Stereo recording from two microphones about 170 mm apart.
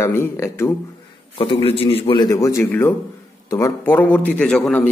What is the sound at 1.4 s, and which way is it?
A man's voice, 35° left (ahead or behind).